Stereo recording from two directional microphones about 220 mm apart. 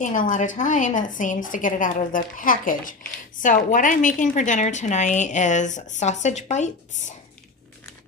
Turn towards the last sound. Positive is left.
turn(degrees=35)  # may be behind; listen again after turning